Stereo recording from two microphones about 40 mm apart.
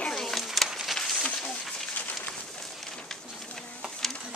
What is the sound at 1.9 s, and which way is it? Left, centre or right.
Rain on surface, left.